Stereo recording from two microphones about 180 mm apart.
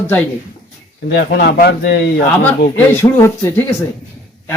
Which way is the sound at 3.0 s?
15° left (ahead or behind).